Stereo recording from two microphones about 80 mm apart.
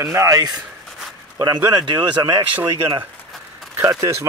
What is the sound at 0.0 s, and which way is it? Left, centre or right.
Speech, right.